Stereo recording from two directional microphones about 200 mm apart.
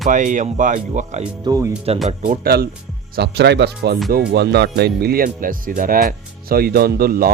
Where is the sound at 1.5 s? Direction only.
15° right (ahead or behind).